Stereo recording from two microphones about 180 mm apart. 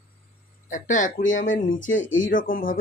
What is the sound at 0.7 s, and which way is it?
Speech, 45° left (ahead or behind).